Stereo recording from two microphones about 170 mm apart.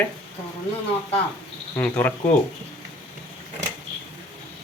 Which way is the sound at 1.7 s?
10° left (ahead or behind).